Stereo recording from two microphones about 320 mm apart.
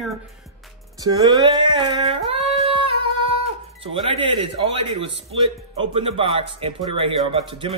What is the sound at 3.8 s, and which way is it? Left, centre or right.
Speech, centre.